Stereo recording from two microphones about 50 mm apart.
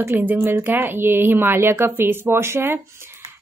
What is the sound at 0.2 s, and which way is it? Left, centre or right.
Speech, right.